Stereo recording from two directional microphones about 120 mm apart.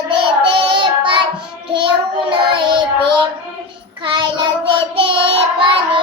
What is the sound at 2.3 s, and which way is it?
Child singing, 45° right (ahead or behind).